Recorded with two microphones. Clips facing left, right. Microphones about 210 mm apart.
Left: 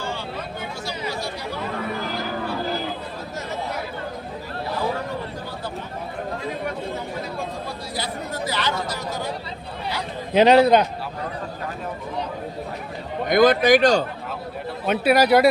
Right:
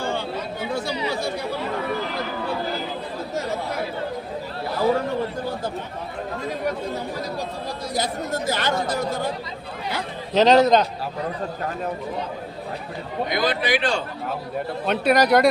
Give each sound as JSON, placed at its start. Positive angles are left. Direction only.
{"t": 0.7, "sound": "chatter", "side_deg": -55}
{"t": 7.9, "sound": "speech", "side_deg": -45}
{"t": 10.3, "sound": "speech", "side_deg": 10}
{"t": 13.2, "sound": "speech", "side_deg": 50}
{"t": 14.8, "sound": "speech", "side_deg": 5}